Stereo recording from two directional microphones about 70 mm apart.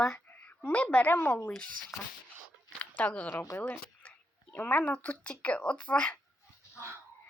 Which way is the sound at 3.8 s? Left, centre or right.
Centre.